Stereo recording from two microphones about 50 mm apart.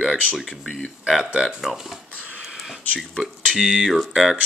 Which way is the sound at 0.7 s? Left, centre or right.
Centre.